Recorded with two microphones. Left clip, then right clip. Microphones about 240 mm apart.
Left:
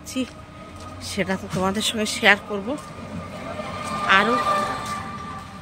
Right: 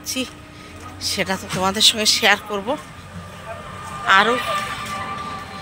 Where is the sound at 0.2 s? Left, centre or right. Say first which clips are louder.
Right 2 dB; centre.